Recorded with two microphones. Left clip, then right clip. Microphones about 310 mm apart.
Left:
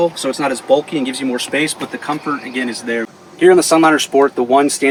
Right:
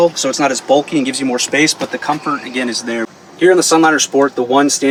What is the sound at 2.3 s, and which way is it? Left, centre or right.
Speech, centre.